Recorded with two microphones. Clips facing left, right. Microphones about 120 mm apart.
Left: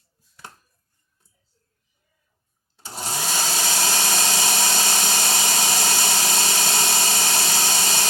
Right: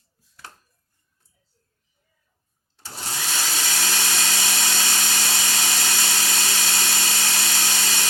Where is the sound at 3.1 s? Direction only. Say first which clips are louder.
Left 3 dB; 30° left (ahead or behind).